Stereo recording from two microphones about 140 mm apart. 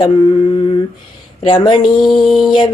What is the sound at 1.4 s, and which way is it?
Mantra, 35° left (ahead or behind).